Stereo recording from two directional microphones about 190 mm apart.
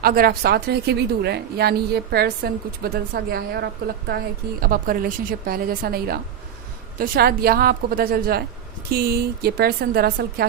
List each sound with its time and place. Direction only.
0.0 s a woman's voice: 50° right (ahead or behind)